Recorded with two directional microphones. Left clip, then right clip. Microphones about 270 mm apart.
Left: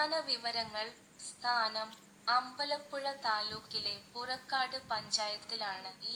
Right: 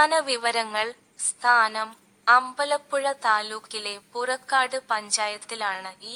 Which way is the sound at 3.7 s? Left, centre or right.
Right.